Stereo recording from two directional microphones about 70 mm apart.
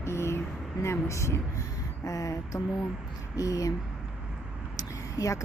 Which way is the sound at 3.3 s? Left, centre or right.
Left.